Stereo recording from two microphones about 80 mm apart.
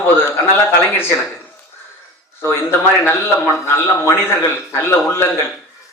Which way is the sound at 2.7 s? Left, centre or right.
Left.